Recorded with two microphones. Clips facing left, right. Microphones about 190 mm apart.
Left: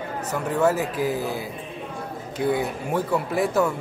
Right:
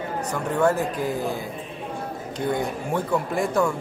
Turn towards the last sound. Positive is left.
turn(degrees=5)  # may be behind; listen again after turning